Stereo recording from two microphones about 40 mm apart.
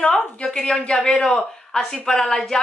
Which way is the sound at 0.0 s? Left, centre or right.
Centre.